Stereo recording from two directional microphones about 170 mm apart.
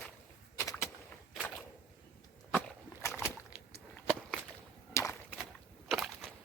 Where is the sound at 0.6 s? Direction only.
15° left (ahead or behind).